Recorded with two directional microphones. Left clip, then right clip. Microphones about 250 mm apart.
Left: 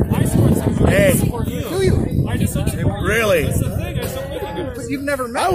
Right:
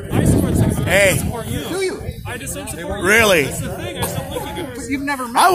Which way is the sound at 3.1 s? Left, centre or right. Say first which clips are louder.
Right 4 dB; right.